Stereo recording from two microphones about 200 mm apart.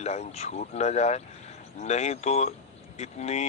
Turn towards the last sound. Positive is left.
turn(degrees=35)  # may be behind; listen again after turning